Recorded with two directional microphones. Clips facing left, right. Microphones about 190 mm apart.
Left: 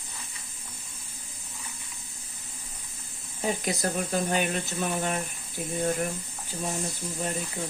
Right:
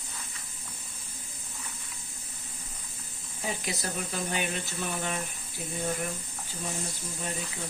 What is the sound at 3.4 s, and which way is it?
Speech, 45° left (ahead or behind).